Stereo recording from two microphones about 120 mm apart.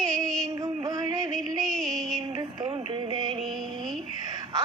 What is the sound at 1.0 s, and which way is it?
Music, 30° right (ahead or behind).